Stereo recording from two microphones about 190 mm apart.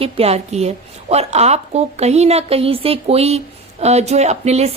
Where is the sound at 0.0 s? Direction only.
30° right (ahead or behind).